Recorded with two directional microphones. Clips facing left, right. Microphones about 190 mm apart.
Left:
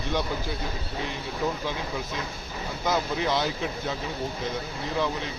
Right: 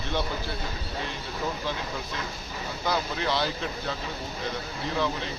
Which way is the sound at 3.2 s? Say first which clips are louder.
Left 2 dB; 15° left (ahead or behind).